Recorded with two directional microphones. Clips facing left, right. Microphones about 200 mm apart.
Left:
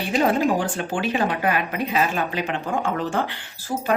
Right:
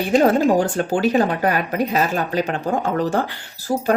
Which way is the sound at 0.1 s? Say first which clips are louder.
Right 5 dB; 45° right (ahead or behind).